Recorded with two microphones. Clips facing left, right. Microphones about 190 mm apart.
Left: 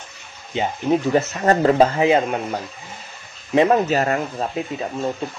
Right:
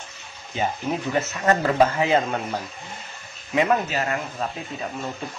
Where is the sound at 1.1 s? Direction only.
35° left (ahead or behind).